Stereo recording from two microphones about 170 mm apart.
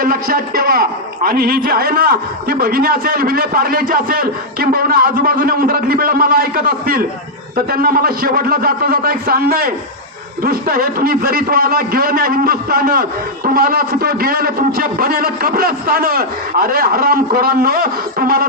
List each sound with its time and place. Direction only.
0.0 s a man's voice: 60° right (ahead or behind)